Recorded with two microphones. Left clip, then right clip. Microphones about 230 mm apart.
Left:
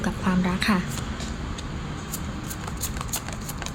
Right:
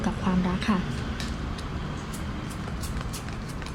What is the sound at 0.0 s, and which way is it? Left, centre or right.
Speech, centre.